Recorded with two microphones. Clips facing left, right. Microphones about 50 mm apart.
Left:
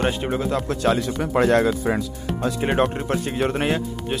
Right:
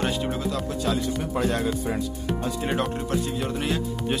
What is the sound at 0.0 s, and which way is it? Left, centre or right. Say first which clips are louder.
Speech: left 3 dB; left.